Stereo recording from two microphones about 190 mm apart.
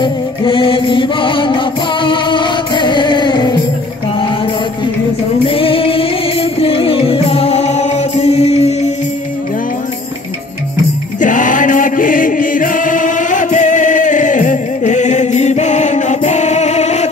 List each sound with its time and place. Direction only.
0.0 s music: 25° left (ahead or behind)
5.5 s music: 30° left (ahead or behind)
11.1 s chant: 40° left (ahead or behind)